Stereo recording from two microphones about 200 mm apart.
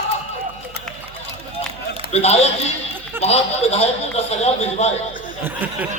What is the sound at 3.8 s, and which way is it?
Speech, 30° left (ahead or behind).